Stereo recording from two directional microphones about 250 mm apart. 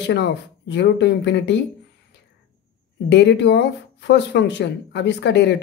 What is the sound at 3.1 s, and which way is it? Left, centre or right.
Speech, left.